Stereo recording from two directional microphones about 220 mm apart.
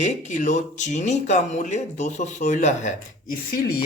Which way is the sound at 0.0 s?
35° left (ahead or behind).